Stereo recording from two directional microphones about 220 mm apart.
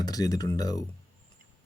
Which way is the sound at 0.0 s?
15° left (ahead or behind).